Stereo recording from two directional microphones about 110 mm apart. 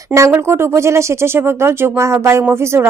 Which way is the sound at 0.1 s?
15° right (ahead or behind).